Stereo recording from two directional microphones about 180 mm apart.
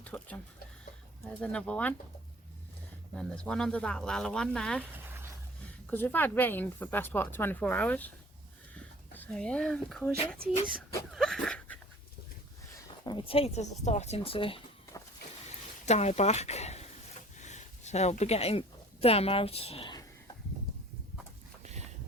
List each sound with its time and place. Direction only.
0.0 s speech: 10° left (ahead or behind)
3.2 s speech: 5° left (ahead or behind)
5.9 s speech: 10° left (ahead or behind)
9.1 s speech: 5° left (ahead or behind)
10.4 s speech: 55° right (ahead or behind)
11.1 s dog: centre (ahead or behind)
13.1 s speech: 30° left (ahead or behind)
15.9 s speech: 40° left (ahead or behind)
17.3 s a sound: 40° left (ahead or behind)
21.6 s a sound: 40° right (ahead or behind)